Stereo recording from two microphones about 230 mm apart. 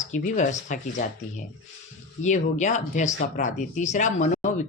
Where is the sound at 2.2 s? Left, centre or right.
Left.